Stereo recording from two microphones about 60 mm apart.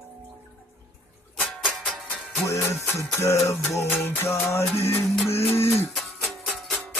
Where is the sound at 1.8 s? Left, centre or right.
Centre.